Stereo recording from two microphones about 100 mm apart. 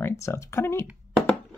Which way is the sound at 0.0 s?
25° left (ahead or behind).